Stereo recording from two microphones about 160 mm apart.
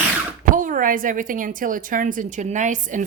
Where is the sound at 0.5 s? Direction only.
55° right (ahead or behind).